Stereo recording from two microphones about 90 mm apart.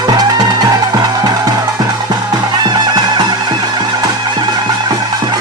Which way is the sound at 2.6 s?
50° right (ahead or behind).